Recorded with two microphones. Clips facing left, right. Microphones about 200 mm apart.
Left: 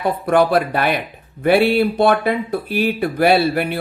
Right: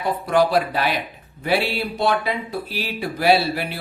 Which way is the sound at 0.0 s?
55° left (ahead or behind).